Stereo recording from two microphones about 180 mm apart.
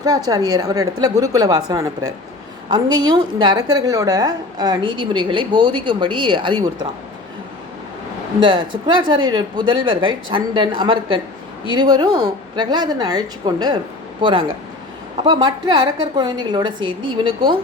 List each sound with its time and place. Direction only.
0.0 s a woman's voice: 20° right (ahead or behind)
8.4 s a woman's voice: 25° right (ahead or behind)